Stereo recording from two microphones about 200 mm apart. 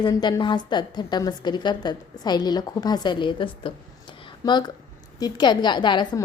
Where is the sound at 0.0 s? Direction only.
20° left (ahead or behind).